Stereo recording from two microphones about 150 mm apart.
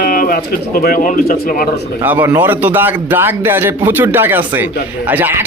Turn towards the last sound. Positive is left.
turn(degrees=-10)  # may be behind; listen again after turning